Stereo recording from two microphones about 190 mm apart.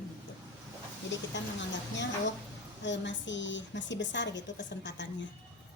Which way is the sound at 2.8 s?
70° left (ahead or behind).